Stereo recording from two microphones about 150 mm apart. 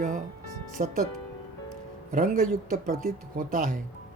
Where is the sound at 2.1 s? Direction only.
65° right (ahead or behind).